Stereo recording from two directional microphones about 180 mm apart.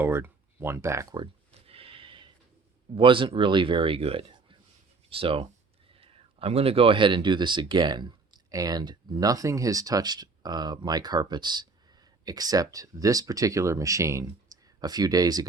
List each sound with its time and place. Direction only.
0.0 s speech: 15° right (ahead or behind)
1.2 s a sound: 30° right (ahead or behind)
2.9 s speech: 30° right (ahead or behind)